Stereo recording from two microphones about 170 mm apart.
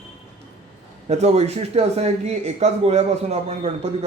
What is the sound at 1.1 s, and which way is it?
A man's voice, 40° right (ahead or behind).